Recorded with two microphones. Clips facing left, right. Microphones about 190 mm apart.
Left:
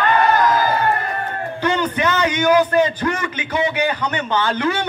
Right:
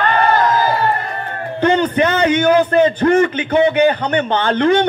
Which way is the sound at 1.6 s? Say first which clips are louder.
Right 6 dB; 55° right (ahead or behind).